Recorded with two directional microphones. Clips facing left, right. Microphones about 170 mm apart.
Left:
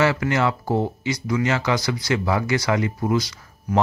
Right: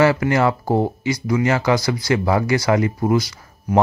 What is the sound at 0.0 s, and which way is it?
Speech, 35° right (ahead or behind).